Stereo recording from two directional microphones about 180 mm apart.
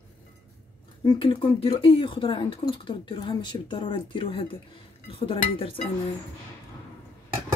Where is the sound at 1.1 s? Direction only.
30° left (ahead or behind).